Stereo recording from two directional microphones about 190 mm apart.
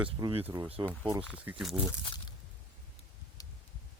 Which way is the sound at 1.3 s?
5° right (ahead or behind).